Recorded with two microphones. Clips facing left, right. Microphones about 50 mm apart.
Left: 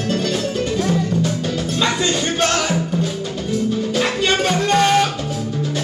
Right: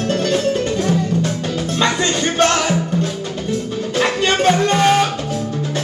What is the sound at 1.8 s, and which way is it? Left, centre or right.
Music, centre.